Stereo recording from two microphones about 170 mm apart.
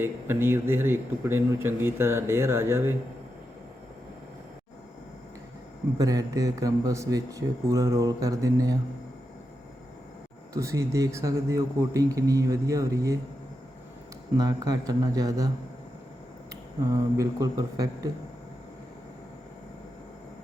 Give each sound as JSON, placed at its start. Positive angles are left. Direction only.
{"t": 0.0, "sound": "speech", "side_deg": -15}
{"t": 6.0, "sound": "speech", "side_deg": -20}
{"t": 10.5, "sound": "speech", "side_deg": -15}
{"t": 14.3, "sound": "speech", "side_deg": -20}
{"t": 16.9, "sound": "speech", "side_deg": -20}